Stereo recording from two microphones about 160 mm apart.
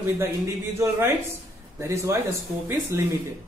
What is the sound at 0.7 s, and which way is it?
Speech, 15° right (ahead or behind).